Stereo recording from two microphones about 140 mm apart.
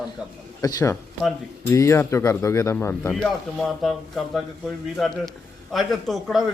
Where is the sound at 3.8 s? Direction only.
Centre (ahead or behind).